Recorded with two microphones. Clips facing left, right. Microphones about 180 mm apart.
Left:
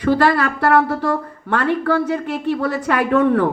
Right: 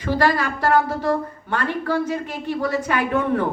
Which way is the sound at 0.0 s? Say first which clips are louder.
Left 4 dB; 70° left (ahead or behind).